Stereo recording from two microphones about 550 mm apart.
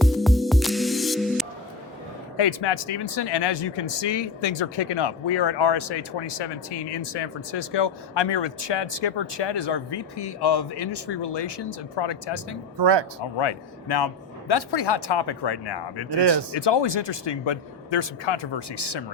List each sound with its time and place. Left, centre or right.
0.0 s music: centre
2.4 s speech: left
12.8 s speech: right
13.4 s speech: left